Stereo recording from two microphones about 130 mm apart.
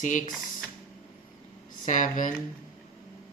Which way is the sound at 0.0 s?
80° left.